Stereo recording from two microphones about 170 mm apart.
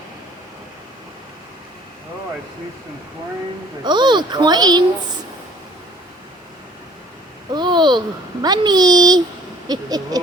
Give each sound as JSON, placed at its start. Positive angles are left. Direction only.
{"t": 3.8, "sound": "speech", "side_deg": -25}
{"t": 7.5, "sound": "a child's voice", "side_deg": -25}